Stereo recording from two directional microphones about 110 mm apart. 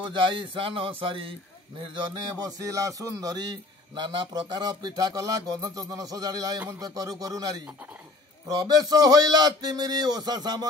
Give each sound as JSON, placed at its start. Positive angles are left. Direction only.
{"t": 0.0, "sound": "speech", "side_deg": -45}
{"t": 2.4, "sound": "a man's voice", "side_deg": -30}